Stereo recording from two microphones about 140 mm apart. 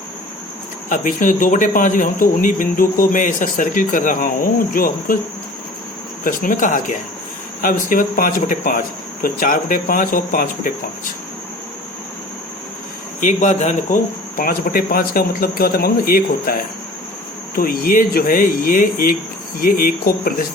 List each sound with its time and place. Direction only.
0.9 s speech: 70° left (ahead or behind); by 5.1 s 85° left
6.2 s speech: 70° left (ahead or behind)
13.1 s speech: 65° left (ahead or behind)
14.3 s speech: 85° left